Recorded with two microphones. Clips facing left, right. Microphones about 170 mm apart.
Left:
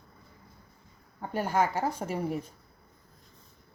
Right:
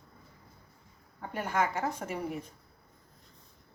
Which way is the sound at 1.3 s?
35° left (ahead or behind).